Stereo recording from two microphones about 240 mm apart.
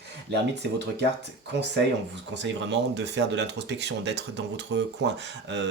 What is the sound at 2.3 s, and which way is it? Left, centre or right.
Speech, right.